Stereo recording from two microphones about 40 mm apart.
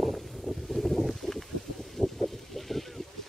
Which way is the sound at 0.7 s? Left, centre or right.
Centre.